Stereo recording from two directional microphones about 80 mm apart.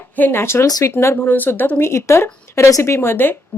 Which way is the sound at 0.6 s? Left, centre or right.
Left.